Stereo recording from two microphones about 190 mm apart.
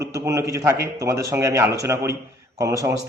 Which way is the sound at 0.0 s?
15° right (ahead or behind).